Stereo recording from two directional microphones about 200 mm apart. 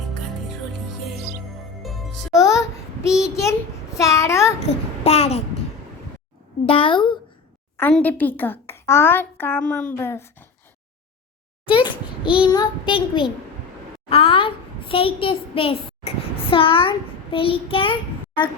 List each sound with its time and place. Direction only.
1.8 s music: centre (ahead or behind)
2.4 s a sound: 15° left (ahead or behind)
3.9 s a child's voice: 15° left (ahead or behind)
4.6 s child singing: 30° left (ahead or behind)
6.7 s child singing: 25° left (ahead or behind)
7.8 s a woman's voice: 10° left (ahead or behind)
11.6 s a sound: 25° left (ahead or behind)
12.4 s child singing: 20° left (ahead or behind)
14.1 s a child's voice: 25° left (ahead or behind)
17.3 s child singing: 25° left (ahead or behind)